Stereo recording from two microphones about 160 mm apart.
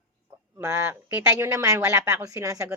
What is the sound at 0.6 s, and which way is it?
A woman's voice, 20° right (ahead or behind).